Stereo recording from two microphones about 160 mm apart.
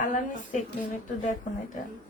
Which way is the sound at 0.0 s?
55° left (ahead or behind).